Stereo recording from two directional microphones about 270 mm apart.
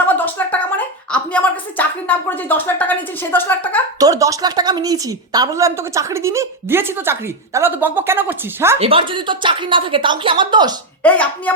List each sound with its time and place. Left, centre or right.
0.1 s a sound: centre
3.3 s speech: centre
4.0 s a woman's voice: centre
8.8 s a woman's voice: centre
11.0 s speech: centre